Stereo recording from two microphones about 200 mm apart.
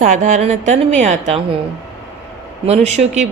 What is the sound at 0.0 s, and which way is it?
Speech, 40° right (ahead or behind).